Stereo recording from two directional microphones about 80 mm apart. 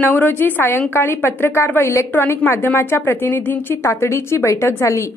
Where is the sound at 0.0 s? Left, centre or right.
Left.